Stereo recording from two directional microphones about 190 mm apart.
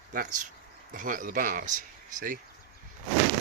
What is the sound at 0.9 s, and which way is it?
Speech, 45° right (ahead or behind).